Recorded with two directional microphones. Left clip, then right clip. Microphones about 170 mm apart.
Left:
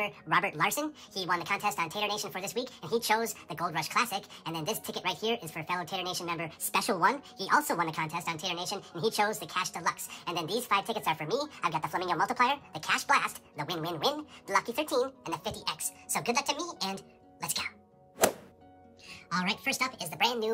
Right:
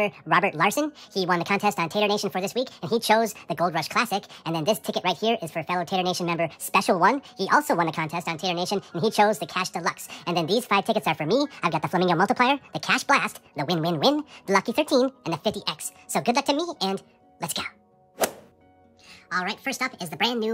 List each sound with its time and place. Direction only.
0.0 s speech: 40° right (ahead or behind)
19.3 s speech: 15° right (ahead or behind)